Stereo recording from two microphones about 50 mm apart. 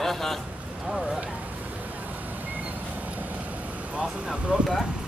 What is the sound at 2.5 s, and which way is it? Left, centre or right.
Vehicle, right.